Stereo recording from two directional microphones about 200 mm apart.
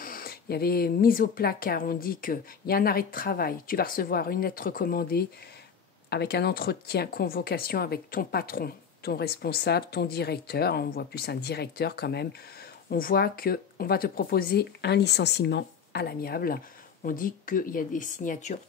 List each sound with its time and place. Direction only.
0.0 s speech: 45° left (ahead or behind)